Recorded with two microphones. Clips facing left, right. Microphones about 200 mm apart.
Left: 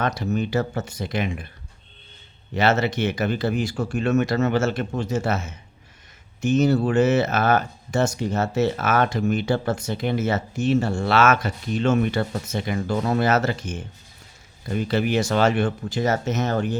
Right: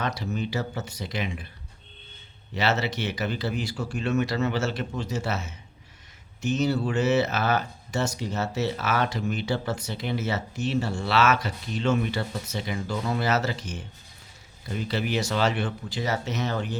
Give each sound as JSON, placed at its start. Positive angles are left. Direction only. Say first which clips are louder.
{"t": 0.0, "sound": "speech", "louder": "left 5 dB", "side_deg": 50}
{"t": 2.6, "sound": "speech", "louder": "left 6 dB", "side_deg": 50}